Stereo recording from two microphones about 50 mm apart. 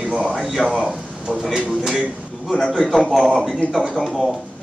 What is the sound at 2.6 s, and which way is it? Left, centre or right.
Speech, centre.